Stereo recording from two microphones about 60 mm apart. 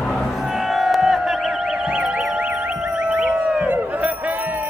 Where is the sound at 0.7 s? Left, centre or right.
Centre.